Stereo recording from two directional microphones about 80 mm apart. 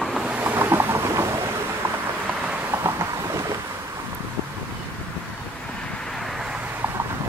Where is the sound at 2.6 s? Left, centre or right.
Right.